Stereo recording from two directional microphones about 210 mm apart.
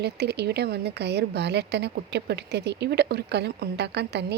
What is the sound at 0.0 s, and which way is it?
A woman's voice, 50° right (ahead or behind).